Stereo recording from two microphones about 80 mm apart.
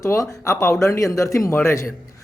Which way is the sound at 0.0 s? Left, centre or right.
Left.